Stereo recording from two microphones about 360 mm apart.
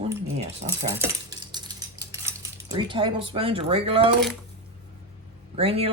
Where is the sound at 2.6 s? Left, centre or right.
Centre.